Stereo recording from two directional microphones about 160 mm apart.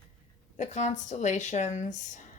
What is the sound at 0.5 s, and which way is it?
Speech, 50° left (ahead or behind).